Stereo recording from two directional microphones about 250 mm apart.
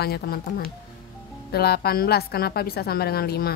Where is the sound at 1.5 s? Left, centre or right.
Left.